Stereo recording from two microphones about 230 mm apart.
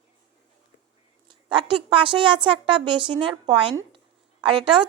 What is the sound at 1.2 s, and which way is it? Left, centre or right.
A woman's voice, right.